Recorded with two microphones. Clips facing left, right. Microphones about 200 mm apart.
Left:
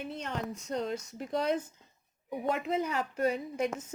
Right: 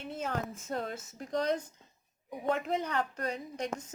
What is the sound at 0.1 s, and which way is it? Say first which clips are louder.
A woman's voice: right 1 dB; centre (ahead or behind).